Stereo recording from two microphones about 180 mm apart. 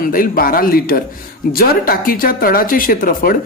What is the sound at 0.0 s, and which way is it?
Speech, 50° left (ahead or behind).